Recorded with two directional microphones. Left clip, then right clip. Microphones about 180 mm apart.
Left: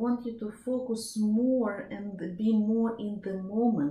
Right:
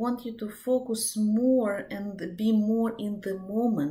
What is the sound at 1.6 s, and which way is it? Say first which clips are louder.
Speech: right 4 dB; 15° right (ahead or behind).